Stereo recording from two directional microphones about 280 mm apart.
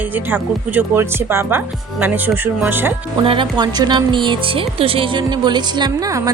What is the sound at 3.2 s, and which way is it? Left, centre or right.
Speech, centre.